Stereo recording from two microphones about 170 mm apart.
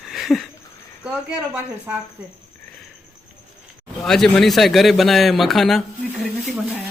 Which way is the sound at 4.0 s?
5° left (ahead or behind).